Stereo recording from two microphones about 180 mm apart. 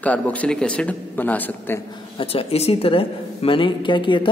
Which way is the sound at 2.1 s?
35° left (ahead or behind).